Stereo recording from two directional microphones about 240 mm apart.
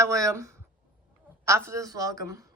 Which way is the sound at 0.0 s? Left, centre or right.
Centre.